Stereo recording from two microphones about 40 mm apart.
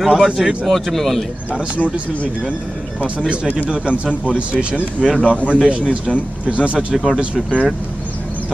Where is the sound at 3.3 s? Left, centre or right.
Right.